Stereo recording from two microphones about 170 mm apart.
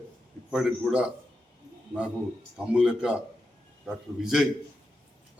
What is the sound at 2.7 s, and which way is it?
A man's voice, 5° right (ahead or behind).